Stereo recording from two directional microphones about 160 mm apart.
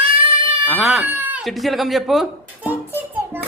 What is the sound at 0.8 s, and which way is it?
Speech, centre (ahead or behind).